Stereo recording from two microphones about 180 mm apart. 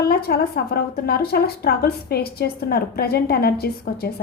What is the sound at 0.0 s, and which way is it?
A woman's voice, 60° left (ahead or behind).